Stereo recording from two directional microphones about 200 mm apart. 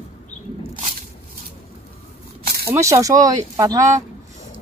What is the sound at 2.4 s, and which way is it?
Snake, 50° right (ahead or behind).